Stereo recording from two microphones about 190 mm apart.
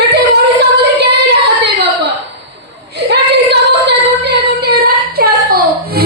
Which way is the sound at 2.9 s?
60° right (ahead or behind).